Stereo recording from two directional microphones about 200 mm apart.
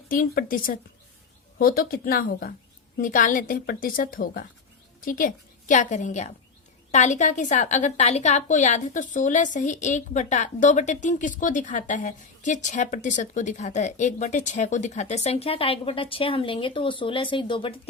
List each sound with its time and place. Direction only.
0.1 s a woman's voice: 45° left (ahead or behind); by 17.7 s 25° left (ahead or behind)